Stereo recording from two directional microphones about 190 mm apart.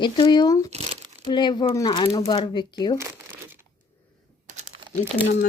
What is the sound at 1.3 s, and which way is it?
Speech, 25° left (ahead or behind).